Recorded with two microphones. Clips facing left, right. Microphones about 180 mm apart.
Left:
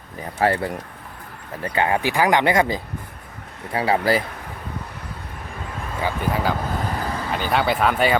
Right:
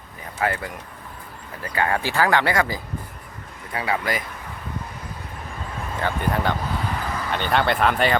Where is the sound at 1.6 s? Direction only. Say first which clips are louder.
Left 3 dB; 20° left (ahead or behind).